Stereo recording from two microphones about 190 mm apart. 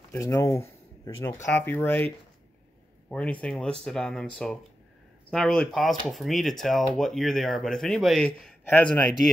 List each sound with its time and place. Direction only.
0.1 s speech: 15° left (ahead or behind)
3.1 s speech: 5° left (ahead or behind)